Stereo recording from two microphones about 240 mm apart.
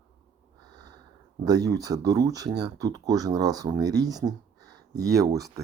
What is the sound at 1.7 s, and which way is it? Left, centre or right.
Speech, centre.